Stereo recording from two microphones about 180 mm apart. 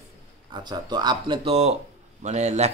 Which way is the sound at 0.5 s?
25° right (ahead or behind).